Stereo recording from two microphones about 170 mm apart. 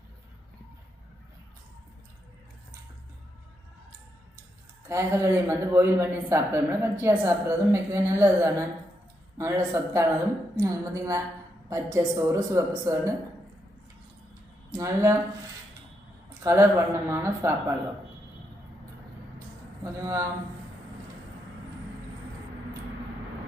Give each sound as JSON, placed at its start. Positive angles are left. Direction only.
{"t": 4.9, "sound": "a woman's voice", "side_deg": -15}
{"t": 14.7, "sound": "a woman's voice", "side_deg": -20}
{"t": 16.4, "sound": "speech", "side_deg": -15}
{"t": 19.8, "sound": "speech", "side_deg": -15}